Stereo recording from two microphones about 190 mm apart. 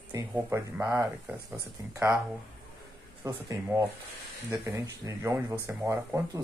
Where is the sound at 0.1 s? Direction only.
15° right (ahead or behind).